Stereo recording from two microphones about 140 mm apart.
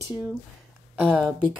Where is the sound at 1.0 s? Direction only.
5° right (ahead or behind).